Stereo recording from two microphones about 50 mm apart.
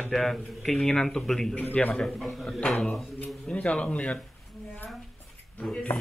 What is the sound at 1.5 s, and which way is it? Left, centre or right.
Speech, left.